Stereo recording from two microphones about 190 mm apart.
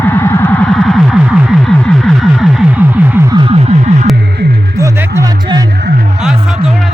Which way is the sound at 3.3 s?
30° right (ahead or behind).